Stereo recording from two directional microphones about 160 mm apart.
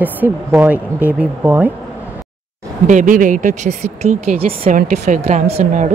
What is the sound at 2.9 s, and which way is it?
Speech, 55° right (ahead or behind).